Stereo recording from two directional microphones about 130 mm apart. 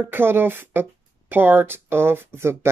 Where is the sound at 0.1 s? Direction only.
15° right (ahead or behind).